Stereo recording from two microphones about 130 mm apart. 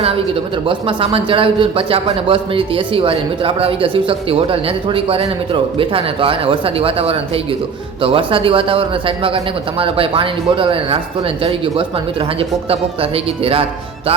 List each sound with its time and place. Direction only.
0.7 s a man's voice: 40° right (ahead or behind)